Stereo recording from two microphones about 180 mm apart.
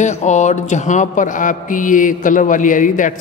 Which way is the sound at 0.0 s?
40° left (ahead or behind).